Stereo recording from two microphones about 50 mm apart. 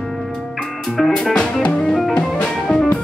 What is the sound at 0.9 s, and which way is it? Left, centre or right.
Music, centre.